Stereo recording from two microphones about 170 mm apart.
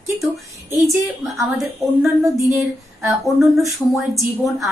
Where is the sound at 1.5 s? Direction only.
Centre (ahead or behind).